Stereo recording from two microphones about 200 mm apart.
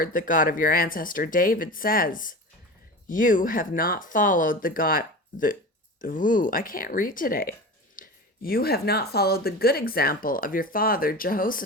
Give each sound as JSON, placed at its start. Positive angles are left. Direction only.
{"t": 0.0, "sound": "speech", "side_deg": 45}